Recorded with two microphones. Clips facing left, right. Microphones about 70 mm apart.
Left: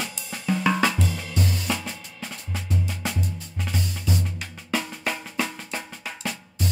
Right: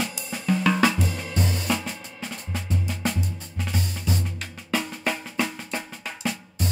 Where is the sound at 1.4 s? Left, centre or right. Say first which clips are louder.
Even; right.